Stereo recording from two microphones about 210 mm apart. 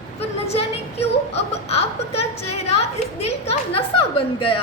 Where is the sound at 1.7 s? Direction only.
30° left (ahead or behind).